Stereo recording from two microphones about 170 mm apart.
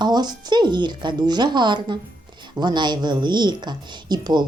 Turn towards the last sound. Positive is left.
turn(degrees=-25)  # may be behind; listen again after turning